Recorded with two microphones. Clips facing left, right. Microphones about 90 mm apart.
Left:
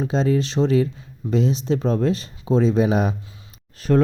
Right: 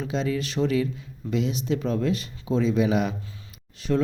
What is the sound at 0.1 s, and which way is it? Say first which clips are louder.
Speech: left 5 dB; 35° left (ahead or behind).